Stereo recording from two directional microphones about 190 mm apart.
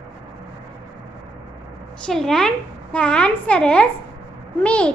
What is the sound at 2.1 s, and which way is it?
A woman's voice, centre (ahead or behind).